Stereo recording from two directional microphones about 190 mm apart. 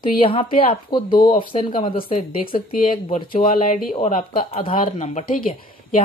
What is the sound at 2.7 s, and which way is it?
Speech, 45° left (ahead or behind).